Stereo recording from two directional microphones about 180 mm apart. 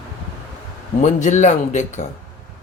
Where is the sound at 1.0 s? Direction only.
40° left (ahead or behind).